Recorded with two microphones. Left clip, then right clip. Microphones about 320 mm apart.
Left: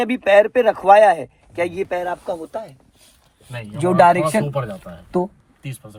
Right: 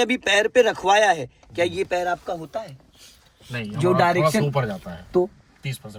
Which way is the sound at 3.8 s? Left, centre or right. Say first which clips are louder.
Left 5 dB; left.